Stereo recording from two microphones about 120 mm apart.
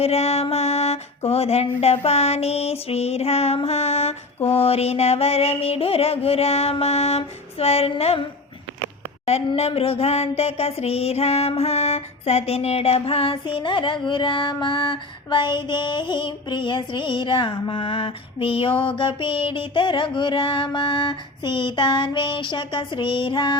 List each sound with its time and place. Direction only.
0.0 s music: 60° left (ahead or behind)
9.5 s music: 55° left (ahead or behind)